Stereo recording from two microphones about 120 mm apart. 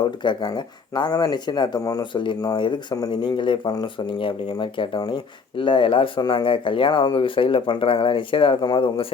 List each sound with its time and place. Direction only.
0.2 s speech: 40° left (ahead or behind)